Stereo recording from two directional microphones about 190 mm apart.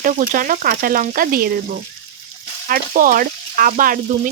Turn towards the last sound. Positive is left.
turn(degrees=-45)  # may be behind; listen again after turning